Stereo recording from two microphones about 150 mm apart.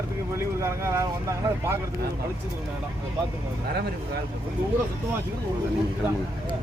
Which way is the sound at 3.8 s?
90° right.